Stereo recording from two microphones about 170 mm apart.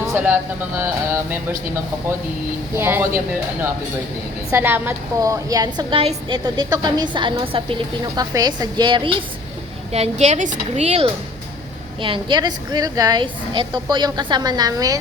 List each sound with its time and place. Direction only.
0.1 s speech: 10° right (ahead or behind)
0.8 s mantra: 15° right (ahead or behind)
2.7 s mantra: 10° right (ahead or behind)
4.5 s a woman's voice: 10° right (ahead or behind); by 7.8 s 30° right (ahead or behind)
8.0 s a woman's voice: 20° right (ahead or behind)